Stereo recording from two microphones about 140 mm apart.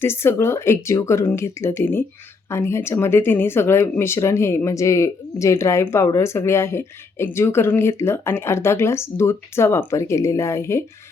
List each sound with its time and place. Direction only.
0.0 s speech: 15° left (ahead or behind)